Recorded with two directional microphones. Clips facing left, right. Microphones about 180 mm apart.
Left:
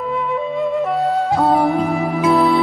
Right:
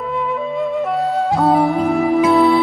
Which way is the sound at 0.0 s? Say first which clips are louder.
Even; centre (ahead or behind).